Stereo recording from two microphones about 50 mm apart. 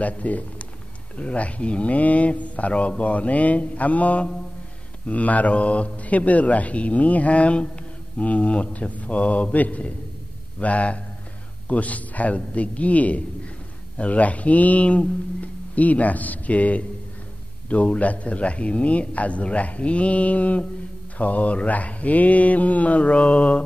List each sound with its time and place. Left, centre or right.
0.0 s speech: left